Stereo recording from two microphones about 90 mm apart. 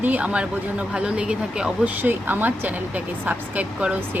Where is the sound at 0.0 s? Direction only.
15° right (ahead or behind).